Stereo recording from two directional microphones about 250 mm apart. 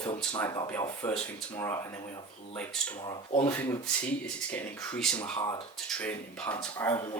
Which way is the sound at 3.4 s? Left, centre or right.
Centre.